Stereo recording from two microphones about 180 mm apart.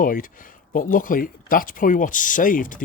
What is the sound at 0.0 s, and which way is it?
Speech, 50° left (ahead or behind).